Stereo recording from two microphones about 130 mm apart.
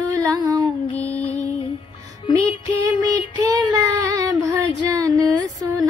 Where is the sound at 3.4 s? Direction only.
25° right (ahead or behind).